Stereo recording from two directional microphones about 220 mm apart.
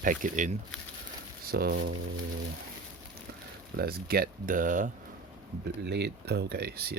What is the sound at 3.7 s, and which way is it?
Speech, 45° right (ahead or behind).